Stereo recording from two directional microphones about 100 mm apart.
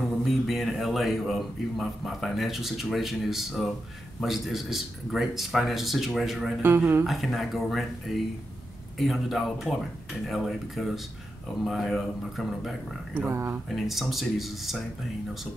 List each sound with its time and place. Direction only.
0.2 s a man's voice: centre (ahead or behind)
6.6 s speech: 25° right (ahead or behind)
7.1 s speech: centre (ahead or behind)
13.3 s speech: 25° right (ahead or behind)
13.7 s speech: centre (ahead or behind)